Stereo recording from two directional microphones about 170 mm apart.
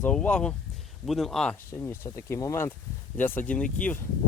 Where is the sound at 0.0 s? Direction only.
5° left (ahead or behind).